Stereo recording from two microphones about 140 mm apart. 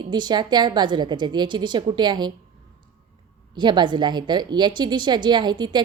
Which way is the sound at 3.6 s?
35° right (ahead or behind).